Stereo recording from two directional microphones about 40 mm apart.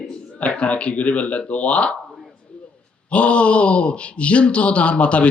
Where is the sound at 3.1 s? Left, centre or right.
Left.